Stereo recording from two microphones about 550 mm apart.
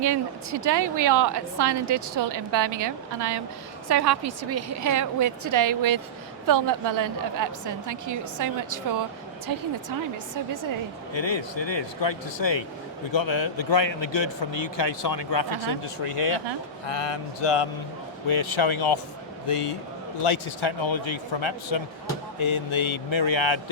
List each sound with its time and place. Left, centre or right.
0.0 s a woman's voice: right
10.3 s a woman's voice: right
11.1 s a man's voice: left
16.9 s a man's voice: left